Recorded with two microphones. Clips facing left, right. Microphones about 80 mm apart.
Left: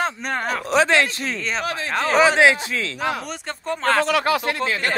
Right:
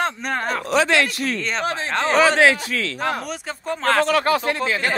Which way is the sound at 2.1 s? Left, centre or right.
Centre.